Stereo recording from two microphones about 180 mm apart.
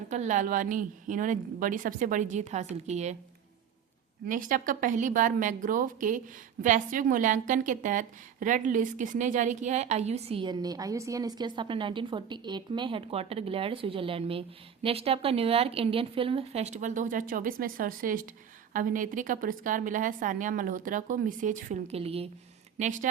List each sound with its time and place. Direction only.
0.1 s a woman's voice: 40° right (ahead or behind)
4.3 s a woman's voice: 50° right (ahead or behind)
22.8 s a woman's voice: 45° right (ahead or behind)